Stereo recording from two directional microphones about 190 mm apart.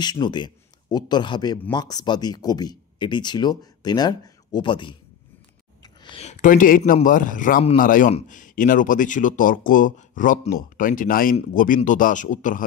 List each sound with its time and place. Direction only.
0.0 s a man's voice: 20° left (ahead or behind)
5.8 s a sound: 30° left (ahead or behind); by 6.8 s 45° left (ahead or behind)
6.8 s speech: 45° left (ahead or behind)